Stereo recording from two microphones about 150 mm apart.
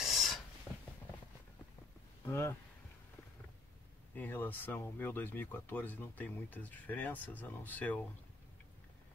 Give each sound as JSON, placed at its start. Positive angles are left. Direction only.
{"t": 0.0, "sound": "filing", "side_deg": 0}
{"t": 2.2, "sound": "speech", "side_deg": 20}
{"t": 4.1, "sound": "speech", "side_deg": 15}